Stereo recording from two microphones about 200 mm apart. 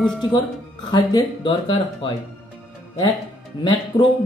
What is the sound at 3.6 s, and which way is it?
Speech, 20° left (ahead or behind).